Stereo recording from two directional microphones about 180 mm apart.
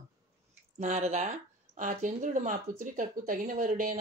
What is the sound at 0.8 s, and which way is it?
Speech, 40° right (ahead or behind).